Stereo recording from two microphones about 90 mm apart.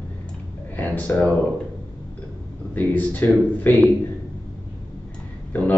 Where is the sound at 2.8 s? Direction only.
20° left (ahead or behind).